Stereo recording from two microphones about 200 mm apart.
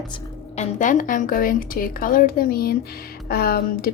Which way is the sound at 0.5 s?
35° left (ahead or behind).